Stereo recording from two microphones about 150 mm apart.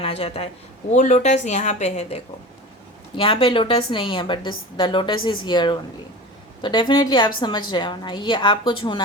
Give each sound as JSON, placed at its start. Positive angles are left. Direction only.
{"t": 0.0, "sound": "a woman's voice", "side_deg": 40}